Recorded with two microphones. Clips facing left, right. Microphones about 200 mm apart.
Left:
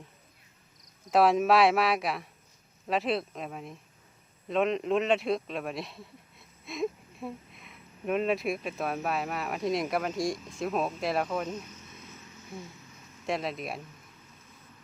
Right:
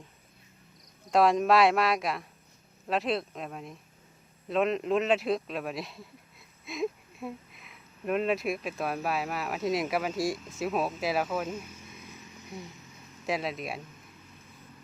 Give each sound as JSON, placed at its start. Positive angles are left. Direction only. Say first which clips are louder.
{"t": 1.1, "sound": "speech", "louder": "even", "side_deg": 5}
{"t": 13.2, "sound": "speech", "louder": "even", "side_deg": 0}